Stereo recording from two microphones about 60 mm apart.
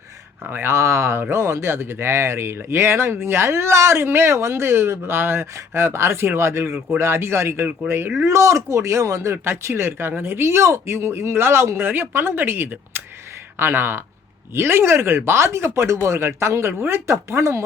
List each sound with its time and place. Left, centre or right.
0.4 s speech: right
0.7 s speech: right
11.8 s speech: right